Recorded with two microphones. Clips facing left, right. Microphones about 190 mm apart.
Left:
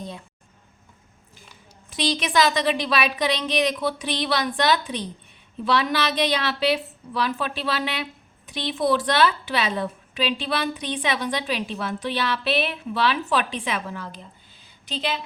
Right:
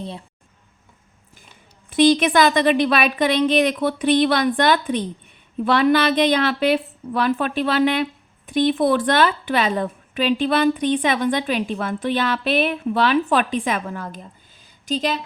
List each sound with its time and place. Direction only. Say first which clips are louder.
1.9 s a woman's voice: right 10 dB; 55° right (ahead or behind)